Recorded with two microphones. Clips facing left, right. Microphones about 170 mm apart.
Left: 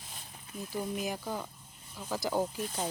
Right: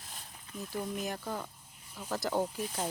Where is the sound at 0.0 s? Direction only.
Centre (ahead or behind).